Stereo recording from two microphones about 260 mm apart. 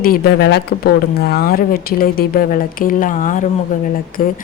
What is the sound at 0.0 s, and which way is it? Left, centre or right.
Speech, left.